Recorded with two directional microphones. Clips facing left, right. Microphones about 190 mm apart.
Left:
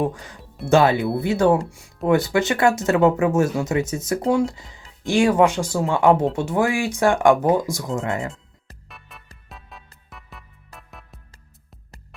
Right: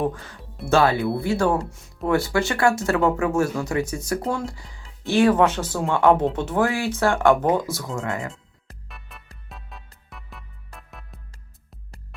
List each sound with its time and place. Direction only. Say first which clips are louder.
0.0 s speech: left 1 dB; 15° left (ahead or behind)
8.0 s speech: left 1 dB; 25° left (ahead or behind)
8.6 s music: right 1 dB; centre (ahead or behind)